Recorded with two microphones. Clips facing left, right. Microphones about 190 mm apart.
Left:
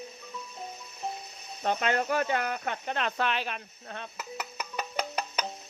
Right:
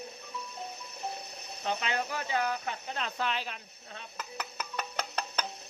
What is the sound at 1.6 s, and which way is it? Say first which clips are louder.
Speech: left 5 dB; 55° left (ahead or behind).